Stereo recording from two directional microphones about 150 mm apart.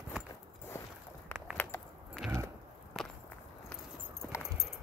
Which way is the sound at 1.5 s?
10° left (ahead or behind).